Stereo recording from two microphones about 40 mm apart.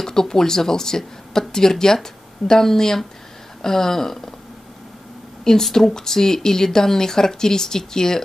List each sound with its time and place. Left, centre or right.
0.0 s speech: centre
5.4 s speech: centre